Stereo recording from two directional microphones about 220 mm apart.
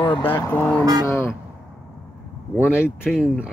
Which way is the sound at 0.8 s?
15° right (ahead or behind).